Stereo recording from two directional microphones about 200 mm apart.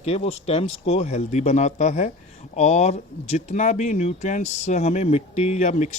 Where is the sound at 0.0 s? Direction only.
30° left (ahead or behind).